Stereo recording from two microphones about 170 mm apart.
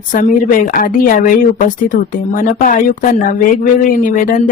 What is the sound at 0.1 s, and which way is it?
A woman's voice, 55° left (ahead or behind).